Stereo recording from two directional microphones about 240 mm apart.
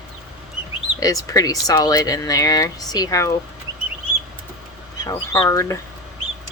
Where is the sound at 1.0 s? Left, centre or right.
Centre.